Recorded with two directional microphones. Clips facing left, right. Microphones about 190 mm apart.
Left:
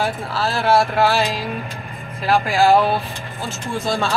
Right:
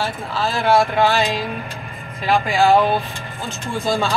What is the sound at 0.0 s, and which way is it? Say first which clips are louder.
Speech: left 1 dB; 5° left (ahead or behind).